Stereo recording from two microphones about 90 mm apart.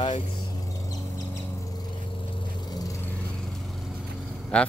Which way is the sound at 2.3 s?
55° left (ahead or behind).